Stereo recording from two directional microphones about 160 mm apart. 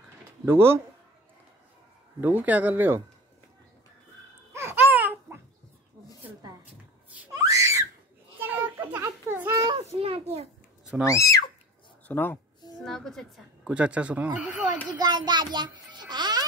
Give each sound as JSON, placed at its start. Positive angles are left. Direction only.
{"t": 0.5, "sound": "speech", "side_deg": -15}
{"t": 2.1, "sound": "speech", "side_deg": -10}
{"t": 4.5, "sound": "babbling", "side_deg": -15}
{"t": 7.3, "sound": "screaming", "side_deg": -20}
{"t": 8.4, "sound": "children playing", "side_deg": -10}
{"t": 8.9, "sound": "a sound", "side_deg": -15}
{"t": 9.9, "sound": "a child's voice", "side_deg": -35}
{"t": 11.1, "sound": "a woman's voice", "side_deg": 20}
{"t": 13.7, "sound": "speech", "side_deg": -5}
{"t": 15.0, "sound": "a child's voice", "side_deg": -25}